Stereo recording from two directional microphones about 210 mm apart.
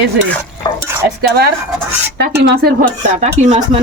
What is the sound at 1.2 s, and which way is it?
Speech, 50° right (ahead or behind).